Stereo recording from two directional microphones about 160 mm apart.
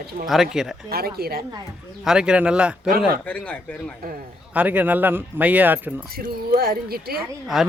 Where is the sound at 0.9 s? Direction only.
75° right (ahead or behind).